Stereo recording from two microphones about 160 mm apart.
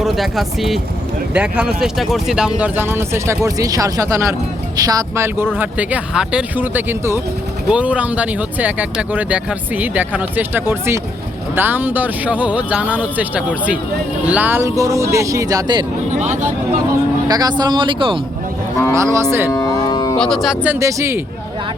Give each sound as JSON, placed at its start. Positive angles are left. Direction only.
{"t": 0.0, "sound": "speech", "side_deg": 0}
{"t": 16.1, "sound": "speech", "side_deg": -50}
{"t": 17.2, "sound": "speech", "side_deg": -25}
{"t": 18.9, "sound": "speech", "side_deg": -20}
{"t": 19.5, "sound": "music", "side_deg": 20}
{"t": 20.1, "sound": "speech", "side_deg": 5}
{"t": 20.7, "sound": "speech", "side_deg": -15}